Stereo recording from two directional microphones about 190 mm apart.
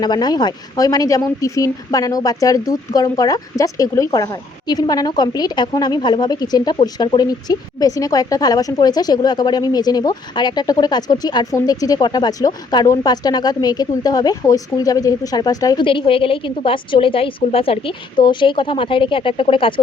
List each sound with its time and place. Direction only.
0.0 s speech: 20° left (ahead or behind)